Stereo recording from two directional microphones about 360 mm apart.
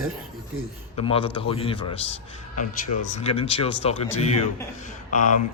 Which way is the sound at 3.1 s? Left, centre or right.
Centre.